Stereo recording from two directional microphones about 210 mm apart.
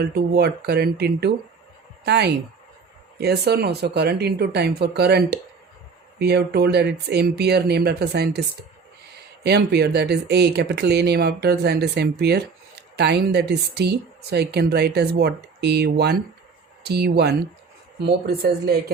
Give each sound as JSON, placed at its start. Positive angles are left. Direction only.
{"t": 0.0, "sound": "speech", "side_deg": -50}
{"t": 9.4, "sound": "speech", "side_deg": -50}